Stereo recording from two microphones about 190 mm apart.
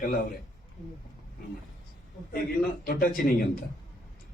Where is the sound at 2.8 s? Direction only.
50° left (ahead or behind).